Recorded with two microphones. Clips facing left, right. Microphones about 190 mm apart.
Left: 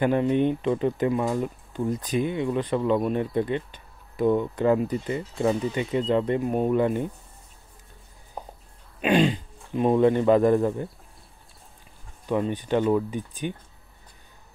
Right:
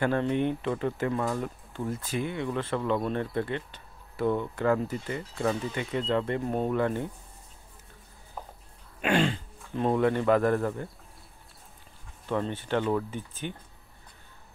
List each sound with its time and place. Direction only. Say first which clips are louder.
0.0 s speech: left 5 dB; 15° left (ahead or behind)
8.4 s a sound: left 3 dB; 15° left (ahead or behind)
9.0 s speech: left 5 dB; 15° left (ahead or behind)
12.3 s speech: left 5 dB; 15° left (ahead or behind)